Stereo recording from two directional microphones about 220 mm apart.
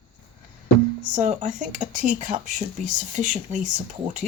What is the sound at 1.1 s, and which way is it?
Speech, 35° right (ahead or behind).